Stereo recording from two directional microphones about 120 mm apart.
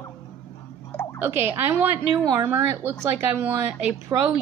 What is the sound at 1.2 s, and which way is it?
A woman's voice, 20° right (ahead or behind).